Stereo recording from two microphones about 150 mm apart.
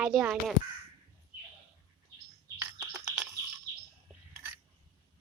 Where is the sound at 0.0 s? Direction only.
5° right (ahead or behind).